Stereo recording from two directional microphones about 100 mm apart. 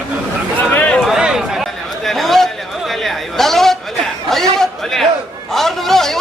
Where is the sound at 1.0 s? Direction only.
5° right (ahead or behind).